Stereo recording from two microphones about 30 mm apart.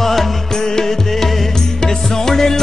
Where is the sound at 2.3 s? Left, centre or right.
Centre.